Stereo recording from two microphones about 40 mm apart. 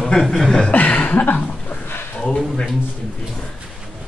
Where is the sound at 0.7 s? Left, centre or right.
Left.